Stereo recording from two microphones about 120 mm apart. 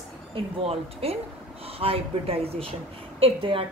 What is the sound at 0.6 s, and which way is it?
A woman's voice, 55° right (ahead or behind).